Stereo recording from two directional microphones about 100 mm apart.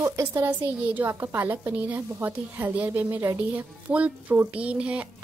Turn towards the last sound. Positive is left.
turn(degrees=-10)  # may be behind; listen again after turning